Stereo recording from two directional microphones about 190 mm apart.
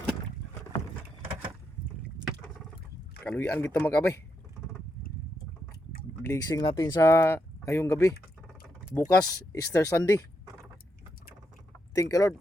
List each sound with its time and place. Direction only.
3.2 s speech: 10° left (ahead or behind)
6.2 s speech: 15° left (ahead or behind)
11.9 s speech: 15° left (ahead or behind)